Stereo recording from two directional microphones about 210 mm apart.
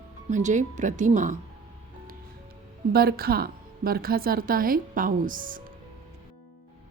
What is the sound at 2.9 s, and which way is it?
A woman's voice, 45° right (ahead or behind).